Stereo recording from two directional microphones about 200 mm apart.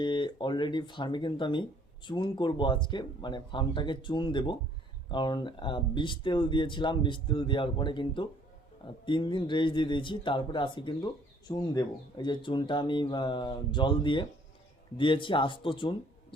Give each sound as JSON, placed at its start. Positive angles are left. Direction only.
{"t": 0.0, "sound": "speech", "side_deg": 25}